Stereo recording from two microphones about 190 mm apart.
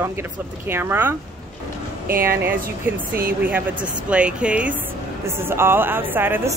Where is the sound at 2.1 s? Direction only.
50° right (ahead or behind).